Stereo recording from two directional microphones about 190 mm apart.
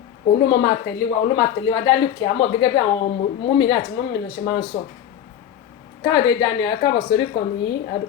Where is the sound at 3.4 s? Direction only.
25° left (ahead or behind).